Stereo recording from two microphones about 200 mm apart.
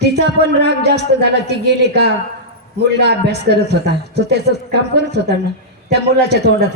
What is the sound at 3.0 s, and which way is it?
Speech, 55° right (ahead or behind).